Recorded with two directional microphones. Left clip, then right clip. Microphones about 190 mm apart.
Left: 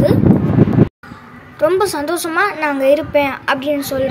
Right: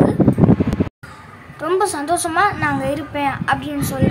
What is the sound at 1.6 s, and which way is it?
A woman's voice, 10° left (ahead or behind).